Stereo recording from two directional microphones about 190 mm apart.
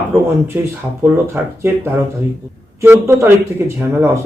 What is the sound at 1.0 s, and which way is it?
Speech, 10° right (ahead or behind).